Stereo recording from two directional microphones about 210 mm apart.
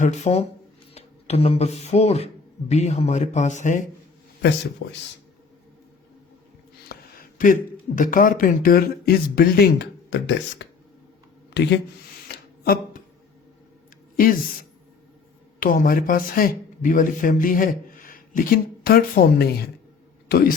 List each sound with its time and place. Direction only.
0.0 s speech: 35° left (ahead or behind)
4.8 s speech: 55° left (ahead or behind)
6.8 s speech: 45° left (ahead or behind)
12.3 s a sound: 45° left (ahead or behind)
15.6 s speech: 40° left (ahead or behind)